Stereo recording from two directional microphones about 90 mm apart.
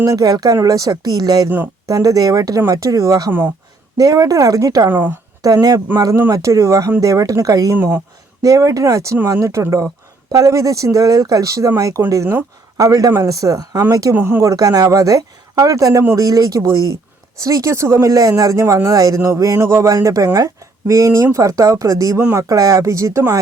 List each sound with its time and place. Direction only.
0.0 s speech: 45° right (ahead or behind)
4.9 s speech: 20° right (ahead or behind)
6.3 s speech: 35° right (ahead or behind)
14.1 s speech: 25° right (ahead or behind)
14.5 s speech: 40° right (ahead or behind)